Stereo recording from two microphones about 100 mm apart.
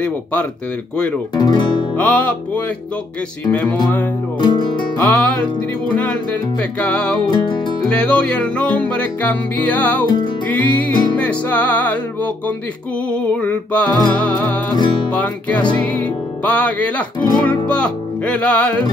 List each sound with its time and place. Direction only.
0.0 s music: 15° left (ahead or behind)
1.3 s speech: 45° left (ahead or behind)
2.0 s music: 15° left (ahead or behind)
3.6 s music: 45° left (ahead or behind)
4.4 s speech: 50° left (ahead or behind)
4.9 s music: 15° left (ahead or behind)
7.2 s music: 50° left (ahead or behind)
7.8 s music: 10° left (ahead or behind)
10.0 s music: 45° left (ahead or behind)
10.5 s music: 15° left (ahead or behind)
14.8 s music: 55° left (ahead or behind)
15.1 s music: 15° left (ahead or behind)
17.6 s speech: 10° left (ahead or behind)